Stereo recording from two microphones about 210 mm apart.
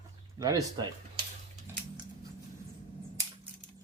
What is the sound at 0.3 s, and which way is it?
Speech, 15° right (ahead or behind).